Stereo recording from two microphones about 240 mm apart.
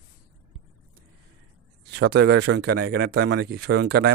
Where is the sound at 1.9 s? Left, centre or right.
Right.